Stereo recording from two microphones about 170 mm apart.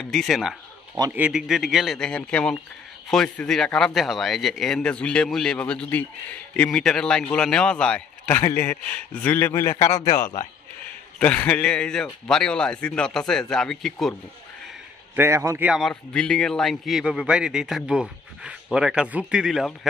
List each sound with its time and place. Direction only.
0.0 s speech: centre (ahead or behind); by 10.5 s 20° left (ahead or behind)
11.1 s speech: 10° left (ahead or behind)
15.1 s a man's voice: 15° right (ahead or behind)
15.9 s speech: 5° left (ahead or behind)